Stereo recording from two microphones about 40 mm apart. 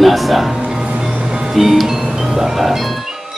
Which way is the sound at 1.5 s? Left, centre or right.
Centre.